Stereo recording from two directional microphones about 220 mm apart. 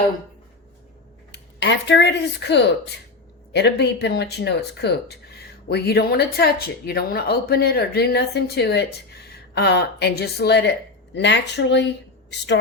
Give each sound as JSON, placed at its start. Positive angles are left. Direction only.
{"t": 1.3, "sound": "speech", "side_deg": 55}